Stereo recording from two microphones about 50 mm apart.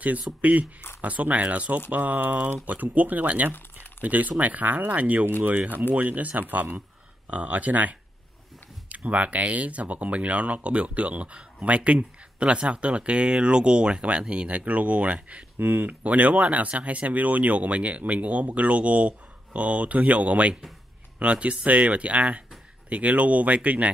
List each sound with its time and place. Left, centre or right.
0.0 s speech: right
15.6 s speech: right